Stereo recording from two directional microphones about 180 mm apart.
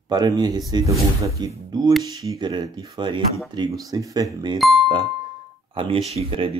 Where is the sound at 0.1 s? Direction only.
20° right (ahead or behind).